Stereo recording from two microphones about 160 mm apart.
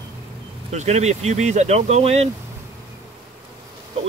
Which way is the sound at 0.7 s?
45° right (ahead or behind).